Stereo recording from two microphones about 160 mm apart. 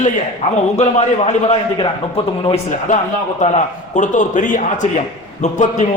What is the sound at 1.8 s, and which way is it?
Speech, 30° left (ahead or behind).